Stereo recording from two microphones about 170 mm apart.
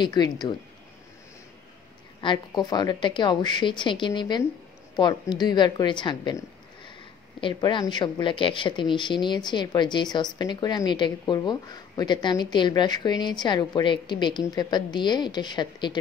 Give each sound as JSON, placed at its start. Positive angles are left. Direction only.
{"t": 0.0, "sound": "speech", "side_deg": 25}
{"t": 2.2, "sound": "speech", "side_deg": 25}
{"t": 7.3, "sound": "speech", "side_deg": 30}